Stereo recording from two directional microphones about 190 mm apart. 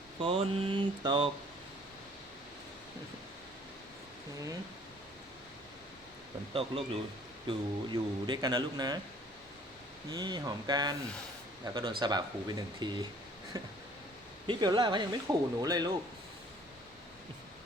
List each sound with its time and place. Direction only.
0.2 s speech: 30° right (ahead or behind)
6.5 s speech: 30° right (ahead or behind)
10.1 s speech: 20° right (ahead or behind)